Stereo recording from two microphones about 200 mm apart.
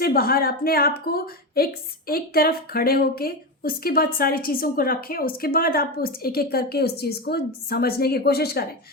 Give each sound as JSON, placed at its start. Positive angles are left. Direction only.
{"t": 0.0, "sound": "speech", "side_deg": 50}